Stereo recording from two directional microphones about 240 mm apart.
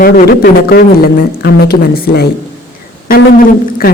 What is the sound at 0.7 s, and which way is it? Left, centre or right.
Speech, left.